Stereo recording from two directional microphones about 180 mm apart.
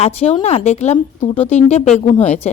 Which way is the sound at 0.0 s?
35° left (ahead or behind).